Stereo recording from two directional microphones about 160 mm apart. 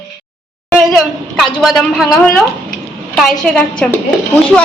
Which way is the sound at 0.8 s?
Centre (ahead or behind).